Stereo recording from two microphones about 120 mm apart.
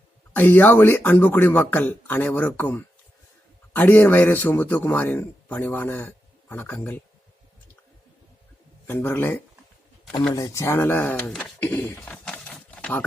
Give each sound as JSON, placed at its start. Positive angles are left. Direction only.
{"t": 0.3, "sound": "a man's voice", "side_deg": 15}
{"t": 8.9, "sound": "a man's voice", "side_deg": 20}